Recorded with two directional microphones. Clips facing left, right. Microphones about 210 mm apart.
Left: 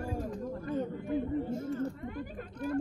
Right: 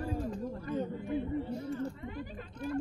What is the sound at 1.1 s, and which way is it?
Chatter, 45° left (ahead or behind).